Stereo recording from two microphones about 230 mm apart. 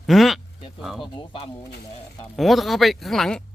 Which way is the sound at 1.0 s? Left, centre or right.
Left.